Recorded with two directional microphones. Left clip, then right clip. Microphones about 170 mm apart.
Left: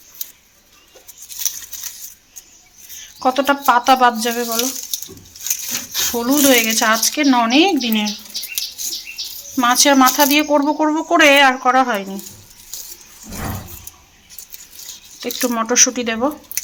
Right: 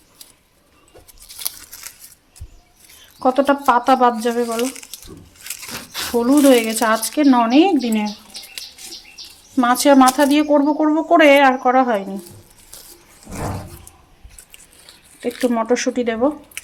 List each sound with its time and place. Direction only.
3.2 s speech: 20° right (ahead or behind)
5.9 s speech: 20° right (ahead or behind)
9.6 s speech: 20° right (ahead or behind)
15.2 s speech: 5° right (ahead or behind)
15.6 s speech: 20° right (ahead or behind)